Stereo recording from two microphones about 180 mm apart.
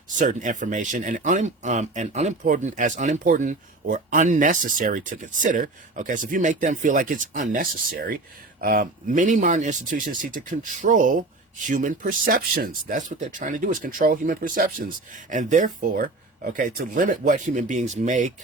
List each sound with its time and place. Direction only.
0.2 s speech: 45° right (ahead or behind)